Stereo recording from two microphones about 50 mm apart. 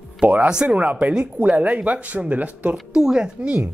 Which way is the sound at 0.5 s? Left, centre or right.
Centre.